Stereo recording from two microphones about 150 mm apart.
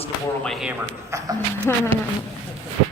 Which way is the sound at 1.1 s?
20° right (ahead or behind).